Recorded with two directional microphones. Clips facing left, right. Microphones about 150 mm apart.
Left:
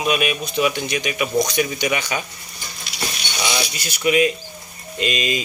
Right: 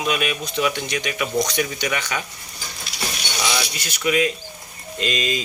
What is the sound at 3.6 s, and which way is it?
Speech, 15° left (ahead or behind).